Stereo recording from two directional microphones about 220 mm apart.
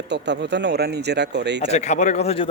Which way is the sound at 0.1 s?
50° right (ahead or behind).